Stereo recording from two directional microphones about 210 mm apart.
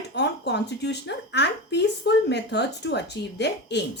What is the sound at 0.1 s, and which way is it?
Speech, 55° left (ahead or behind).